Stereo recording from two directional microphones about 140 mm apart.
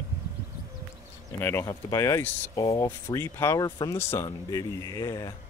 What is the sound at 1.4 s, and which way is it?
Speech, 20° left (ahead or behind).